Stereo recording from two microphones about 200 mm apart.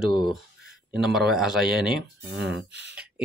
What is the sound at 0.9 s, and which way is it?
Speech, centre (ahead or behind).